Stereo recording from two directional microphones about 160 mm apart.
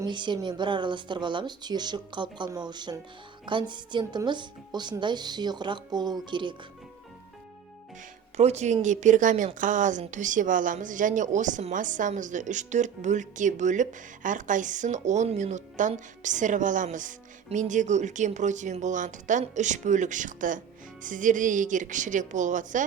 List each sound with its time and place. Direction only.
0.0 s a woman's voice: 30° right (ahead or behind)
8.4 s speech: 45° right (ahead or behind)